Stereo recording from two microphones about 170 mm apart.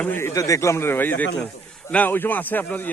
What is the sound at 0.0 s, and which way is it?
A man's voice, 10° left (ahead or behind).